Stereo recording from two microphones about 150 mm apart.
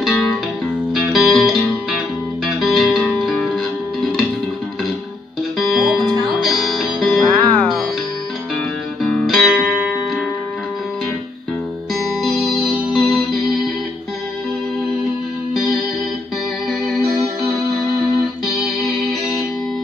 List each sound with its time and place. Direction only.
0.9 s music: centre (ahead or behind)
5.6 s music: centre (ahead or behind)
9.3 s music: centre (ahead or behind)
11.9 s music: centre (ahead or behind)